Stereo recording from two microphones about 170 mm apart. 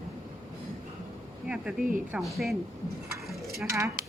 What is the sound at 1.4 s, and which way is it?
A woman's voice, 5° right (ahead or behind).